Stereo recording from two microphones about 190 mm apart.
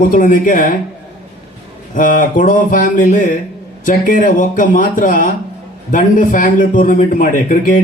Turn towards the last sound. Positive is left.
turn(degrees=45)  # may be behind; listen again after turning